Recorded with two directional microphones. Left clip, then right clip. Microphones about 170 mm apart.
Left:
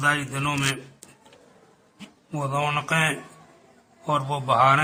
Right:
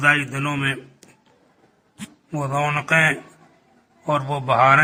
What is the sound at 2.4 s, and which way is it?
A man's voice, 15° right (ahead or behind).